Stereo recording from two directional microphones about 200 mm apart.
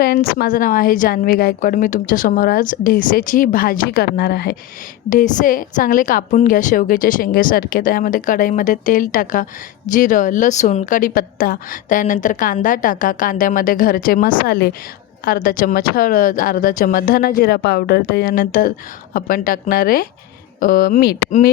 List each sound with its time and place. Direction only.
0.0 s a woman's voice: 50° left (ahead or behind)
5.0 s a woman's voice: 40° left (ahead or behind)